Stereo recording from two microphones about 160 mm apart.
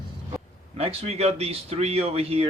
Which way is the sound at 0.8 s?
40° right (ahead or behind).